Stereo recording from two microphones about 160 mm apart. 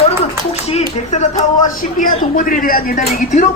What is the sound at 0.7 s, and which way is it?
Speech, 45° left (ahead or behind).